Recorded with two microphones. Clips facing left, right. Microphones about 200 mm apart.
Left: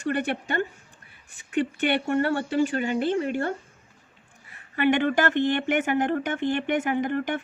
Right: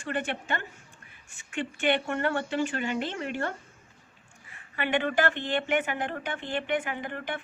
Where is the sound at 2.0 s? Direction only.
35° left (ahead or behind).